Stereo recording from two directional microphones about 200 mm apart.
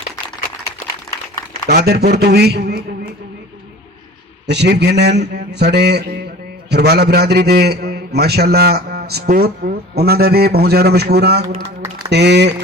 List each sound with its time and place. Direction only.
1.6 s a man's voice: 50° right (ahead or behind)
4.4 s a man's voice: 55° right (ahead or behind)
11.8 s a sound: 15° right (ahead or behind)
12.1 s a man's voice: 60° right (ahead or behind)